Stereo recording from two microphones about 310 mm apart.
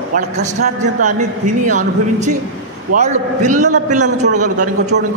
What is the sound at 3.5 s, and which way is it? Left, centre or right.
Speech, right.